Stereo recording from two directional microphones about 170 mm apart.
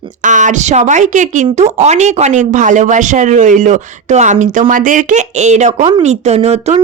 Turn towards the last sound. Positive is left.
turn(degrees=-40)  # may be behind; listen again after turning